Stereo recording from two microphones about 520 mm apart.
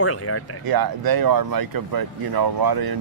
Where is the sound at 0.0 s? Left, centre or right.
Left.